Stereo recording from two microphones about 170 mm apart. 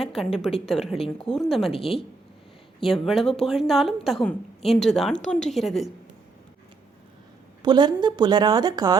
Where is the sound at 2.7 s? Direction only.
Centre (ahead or behind).